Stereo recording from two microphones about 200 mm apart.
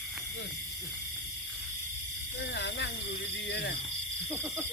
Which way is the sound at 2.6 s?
60° left (ahead or behind).